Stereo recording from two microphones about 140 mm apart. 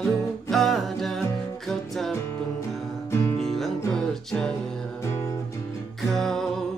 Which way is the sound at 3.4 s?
Centre (ahead or behind).